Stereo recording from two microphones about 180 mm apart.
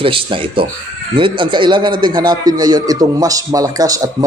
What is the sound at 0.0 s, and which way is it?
A man's voice, 30° right (ahead or behind).